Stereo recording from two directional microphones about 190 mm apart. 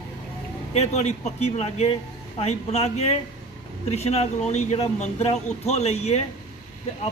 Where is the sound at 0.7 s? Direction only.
35° left (ahead or behind).